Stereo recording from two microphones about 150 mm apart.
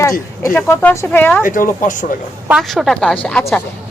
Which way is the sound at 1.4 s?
60° left (ahead or behind).